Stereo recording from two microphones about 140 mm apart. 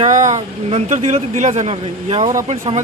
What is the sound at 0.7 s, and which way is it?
Speech, 55° right (ahead or behind).